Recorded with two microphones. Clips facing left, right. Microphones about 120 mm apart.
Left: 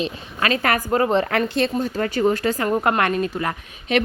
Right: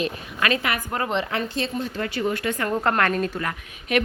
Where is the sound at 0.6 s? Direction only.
45° left (ahead or behind).